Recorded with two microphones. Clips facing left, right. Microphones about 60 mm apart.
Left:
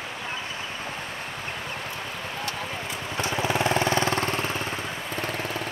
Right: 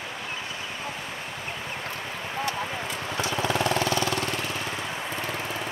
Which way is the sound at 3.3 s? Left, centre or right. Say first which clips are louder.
Left 2 dB; centre.